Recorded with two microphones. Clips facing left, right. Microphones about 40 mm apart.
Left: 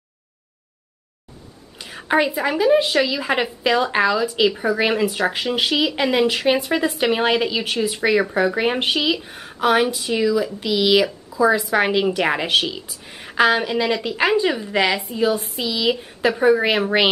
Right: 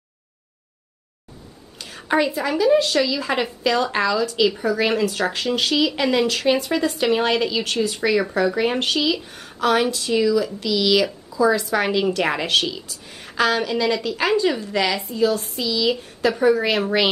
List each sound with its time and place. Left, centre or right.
1.8 s a woman's voice: centre